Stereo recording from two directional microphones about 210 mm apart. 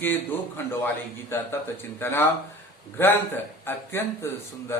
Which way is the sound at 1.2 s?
10° left (ahead or behind).